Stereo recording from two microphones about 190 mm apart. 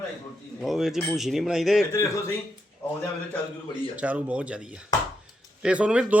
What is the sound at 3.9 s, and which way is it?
Speech, 5° right (ahead or behind).